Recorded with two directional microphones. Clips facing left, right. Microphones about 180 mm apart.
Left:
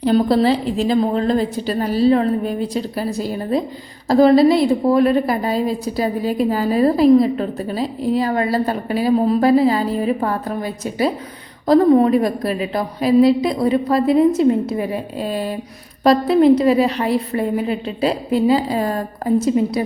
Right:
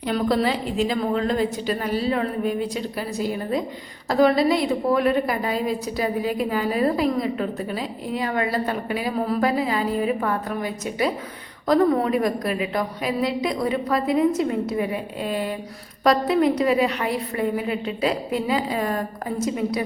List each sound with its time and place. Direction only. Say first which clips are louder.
0.0 s a woman's voice: left 7 dB; 30° left (ahead or behind)